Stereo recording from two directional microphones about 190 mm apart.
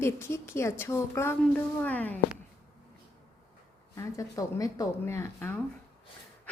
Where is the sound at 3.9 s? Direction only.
20° left (ahead or behind).